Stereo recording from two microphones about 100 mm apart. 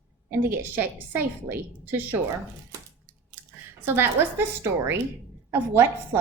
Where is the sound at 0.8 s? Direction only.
20° right (ahead or behind).